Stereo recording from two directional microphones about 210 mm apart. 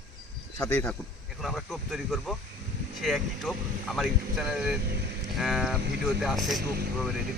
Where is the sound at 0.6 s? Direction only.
10° left (ahead or behind).